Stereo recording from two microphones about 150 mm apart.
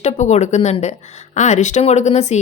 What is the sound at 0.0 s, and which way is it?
A woman's voice, 50° left (ahead or behind).